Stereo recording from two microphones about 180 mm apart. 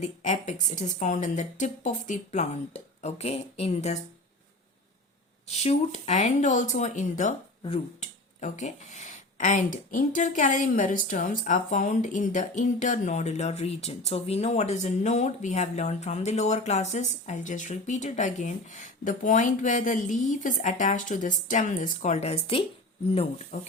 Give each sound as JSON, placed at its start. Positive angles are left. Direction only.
{"t": 0.0, "sound": "speech", "side_deg": 40}
{"t": 5.5, "sound": "speech", "side_deg": 35}
{"t": 23.5, "sound": "speech", "side_deg": 45}